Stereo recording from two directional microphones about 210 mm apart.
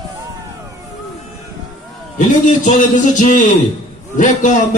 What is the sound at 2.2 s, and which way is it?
A man's voice, 35° left (ahead or behind).